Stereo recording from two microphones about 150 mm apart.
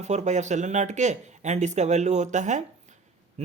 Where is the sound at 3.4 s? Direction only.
45° right (ahead or behind).